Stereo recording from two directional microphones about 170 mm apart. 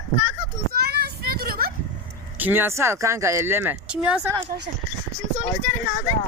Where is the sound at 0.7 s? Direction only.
70° right (ahead or behind).